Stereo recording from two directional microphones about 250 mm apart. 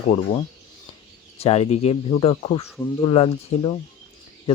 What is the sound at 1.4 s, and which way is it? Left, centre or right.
Speech, left.